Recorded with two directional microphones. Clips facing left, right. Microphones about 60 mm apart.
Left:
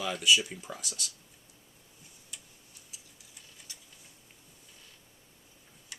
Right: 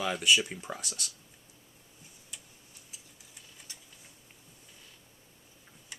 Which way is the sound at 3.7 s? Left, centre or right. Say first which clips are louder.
Even; right.